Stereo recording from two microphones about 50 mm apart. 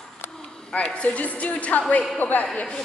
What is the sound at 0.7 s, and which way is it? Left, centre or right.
A woman's voice, left.